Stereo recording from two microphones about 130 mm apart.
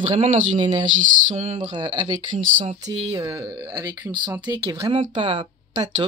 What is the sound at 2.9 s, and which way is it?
Speech, 30° right (ahead or behind).